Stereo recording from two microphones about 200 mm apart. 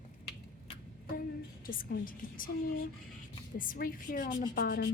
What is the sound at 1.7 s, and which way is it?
A woman's voice, 45° left (ahead or behind).